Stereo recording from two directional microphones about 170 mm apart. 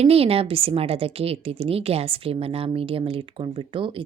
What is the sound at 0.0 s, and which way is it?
A woman's voice, 35° right (ahead or behind).